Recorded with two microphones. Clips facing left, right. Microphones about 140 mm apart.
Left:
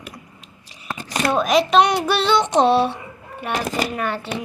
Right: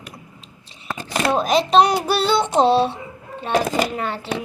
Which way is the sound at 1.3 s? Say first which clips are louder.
Even; 30° right (ahead or behind).